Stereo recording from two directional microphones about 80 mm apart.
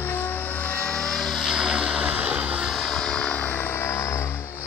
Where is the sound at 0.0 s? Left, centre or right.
Left; by 2.7 s centre.